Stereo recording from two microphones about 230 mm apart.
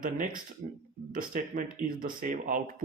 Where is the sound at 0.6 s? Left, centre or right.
Right.